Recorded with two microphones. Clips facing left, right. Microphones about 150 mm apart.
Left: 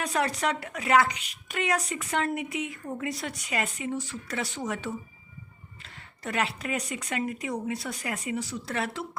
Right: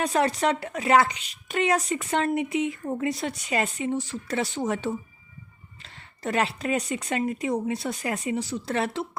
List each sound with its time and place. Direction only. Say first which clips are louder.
0.0 s a woman's voice: right 4 dB; 25° right (ahead or behind)